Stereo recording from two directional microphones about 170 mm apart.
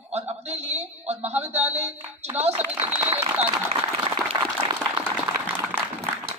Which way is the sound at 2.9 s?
10° right (ahead or behind).